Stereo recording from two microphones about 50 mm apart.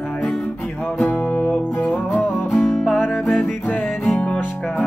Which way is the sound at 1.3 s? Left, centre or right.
Left.